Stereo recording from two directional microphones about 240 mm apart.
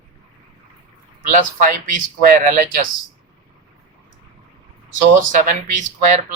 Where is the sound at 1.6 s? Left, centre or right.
Right.